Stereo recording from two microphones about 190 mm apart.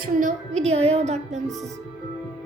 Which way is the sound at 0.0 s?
45° right (ahead or behind).